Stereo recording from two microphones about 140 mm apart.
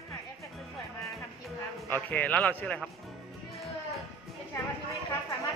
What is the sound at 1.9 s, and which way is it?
Speech, 10° left (ahead or behind).